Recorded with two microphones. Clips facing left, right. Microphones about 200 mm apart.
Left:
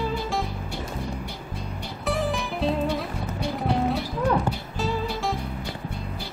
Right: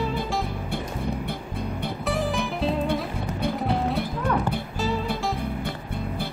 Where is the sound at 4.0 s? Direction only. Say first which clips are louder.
Left 1 dB; 55° right (ahead or behind).